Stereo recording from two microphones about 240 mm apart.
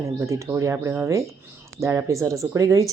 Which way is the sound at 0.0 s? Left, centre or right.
Centre.